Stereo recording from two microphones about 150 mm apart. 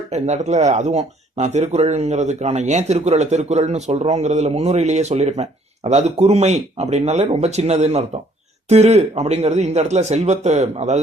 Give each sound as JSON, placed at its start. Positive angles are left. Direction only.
{"t": 0.1, "sound": "speech", "side_deg": -50}